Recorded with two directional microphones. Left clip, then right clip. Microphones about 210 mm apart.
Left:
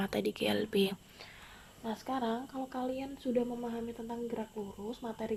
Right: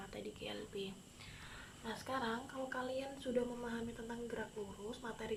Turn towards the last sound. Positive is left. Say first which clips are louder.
# left 6 dB
turn(degrees=20)  # may be behind; listen again after turning